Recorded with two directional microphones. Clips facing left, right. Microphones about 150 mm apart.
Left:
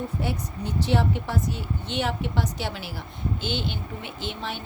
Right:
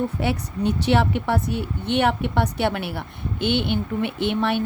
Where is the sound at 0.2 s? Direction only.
70° right (ahead or behind).